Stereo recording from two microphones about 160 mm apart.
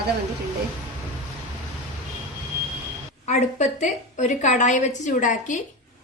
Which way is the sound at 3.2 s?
50° left (ahead or behind).